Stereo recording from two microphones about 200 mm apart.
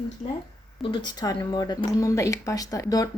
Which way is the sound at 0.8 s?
25° left (ahead or behind).